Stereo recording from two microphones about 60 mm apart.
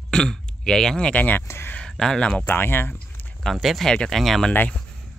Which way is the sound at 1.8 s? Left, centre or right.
Centre.